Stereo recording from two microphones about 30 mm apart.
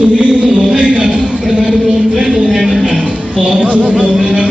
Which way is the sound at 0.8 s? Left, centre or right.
Right.